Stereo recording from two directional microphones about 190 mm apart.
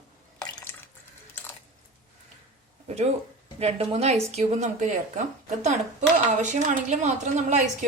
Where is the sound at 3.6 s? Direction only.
30° right (ahead or behind).